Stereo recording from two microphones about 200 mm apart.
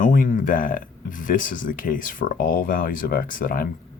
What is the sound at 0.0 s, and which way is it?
Speech, 40° left (ahead or behind).